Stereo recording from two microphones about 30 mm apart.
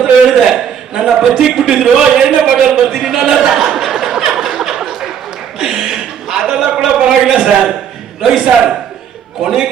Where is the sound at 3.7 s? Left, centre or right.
Centre.